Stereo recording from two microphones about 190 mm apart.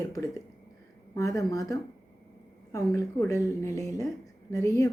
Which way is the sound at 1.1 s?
15° left (ahead or behind).